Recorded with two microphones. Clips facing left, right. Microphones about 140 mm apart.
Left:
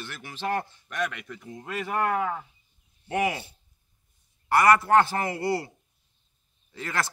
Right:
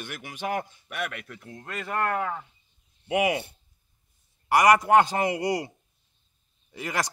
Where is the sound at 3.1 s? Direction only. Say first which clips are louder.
Right 2 dB; 15° right (ahead or behind).